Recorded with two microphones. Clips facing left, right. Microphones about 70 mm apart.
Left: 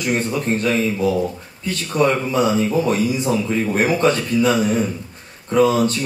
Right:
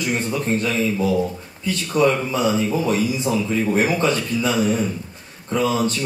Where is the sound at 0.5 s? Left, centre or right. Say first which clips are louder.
Even; left.